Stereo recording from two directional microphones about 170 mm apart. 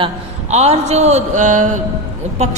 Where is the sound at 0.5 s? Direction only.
40° right (ahead or behind).